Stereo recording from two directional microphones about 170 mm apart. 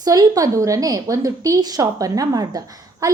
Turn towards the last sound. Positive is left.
turn(degrees=-20)  # may be behind; listen again after turning